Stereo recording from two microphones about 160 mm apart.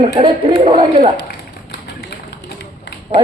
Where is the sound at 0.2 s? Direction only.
35° right (ahead or behind).